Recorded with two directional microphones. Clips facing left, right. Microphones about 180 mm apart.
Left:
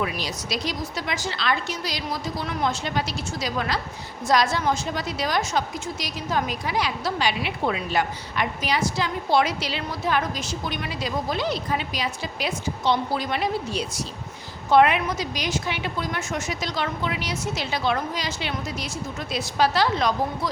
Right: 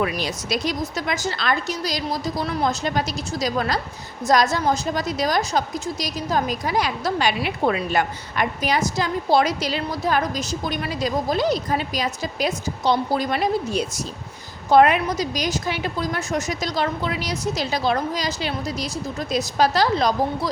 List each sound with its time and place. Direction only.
0.0 s a woman's voice: 55° right (ahead or behind); by 20.5 s 35° right (ahead or behind)